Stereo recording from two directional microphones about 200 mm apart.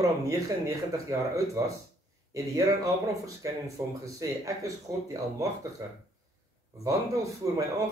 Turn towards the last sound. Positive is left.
turn(degrees=-15)  # may be behind; listen again after turning